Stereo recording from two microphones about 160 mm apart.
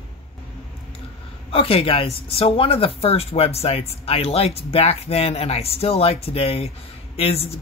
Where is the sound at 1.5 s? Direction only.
35° left (ahead or behind).